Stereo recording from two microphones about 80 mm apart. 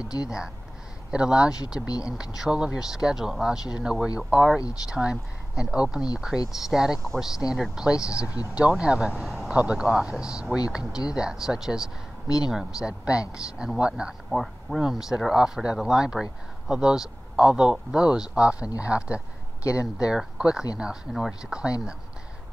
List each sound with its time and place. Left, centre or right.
1.1 s speech: centre
9.5 s speech: centre
14.3 s speech: centre
19.6 s speech: left
20.0 s speech: centre